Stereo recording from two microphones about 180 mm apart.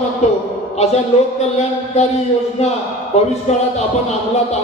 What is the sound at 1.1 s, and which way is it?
Speech, 35° left (ahead or behind).